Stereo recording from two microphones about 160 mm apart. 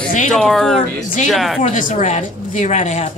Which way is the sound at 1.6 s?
55° left (ahead or behind).